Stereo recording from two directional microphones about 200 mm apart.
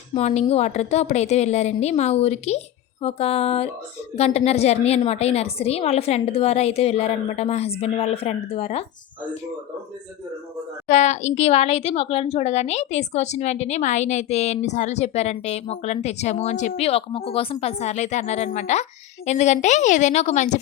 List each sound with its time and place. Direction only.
0.1 s a woman's voice: 35° left (ahead or behind)
10.8 s a woman's voice: 35° left (ahead or behind)